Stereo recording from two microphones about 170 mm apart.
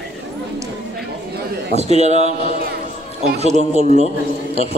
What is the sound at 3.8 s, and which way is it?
Speech, 40° right (ahead or behind).